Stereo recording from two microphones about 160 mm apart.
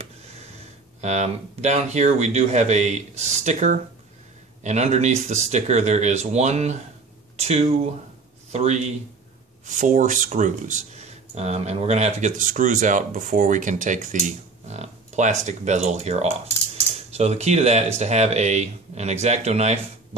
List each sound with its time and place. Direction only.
1.0 s speech: 45° right (ahead or behind)